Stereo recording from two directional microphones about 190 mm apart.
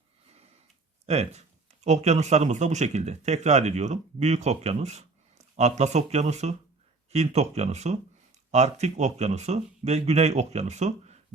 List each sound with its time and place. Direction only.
1.0 s speech: 35° right (ahead or behind)